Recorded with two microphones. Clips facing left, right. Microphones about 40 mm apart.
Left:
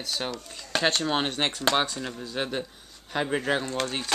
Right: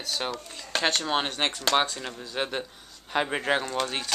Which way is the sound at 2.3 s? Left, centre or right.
Centre.